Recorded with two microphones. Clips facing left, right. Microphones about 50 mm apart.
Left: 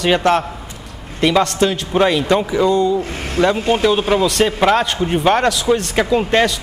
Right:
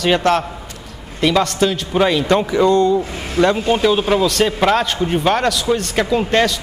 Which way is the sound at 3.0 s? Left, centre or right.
Left.